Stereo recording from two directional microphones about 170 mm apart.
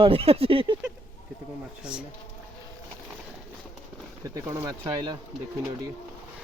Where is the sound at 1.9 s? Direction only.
5° right (ahead or behind).